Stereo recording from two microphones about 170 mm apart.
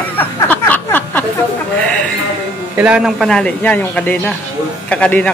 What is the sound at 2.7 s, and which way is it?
Speech, 5° right (ahead or behind).